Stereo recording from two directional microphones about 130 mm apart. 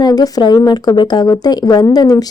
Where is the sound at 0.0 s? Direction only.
30° left (ahead or behind).